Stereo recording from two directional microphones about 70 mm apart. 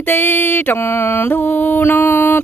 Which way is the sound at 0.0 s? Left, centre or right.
Left.